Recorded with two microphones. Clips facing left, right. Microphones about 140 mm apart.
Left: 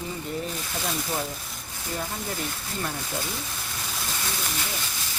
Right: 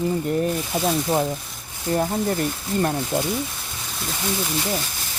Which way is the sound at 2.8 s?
45° right (ahead or behind).